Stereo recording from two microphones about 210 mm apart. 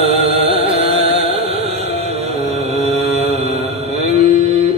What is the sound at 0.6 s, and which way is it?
Music, 30° right (ahead or behind).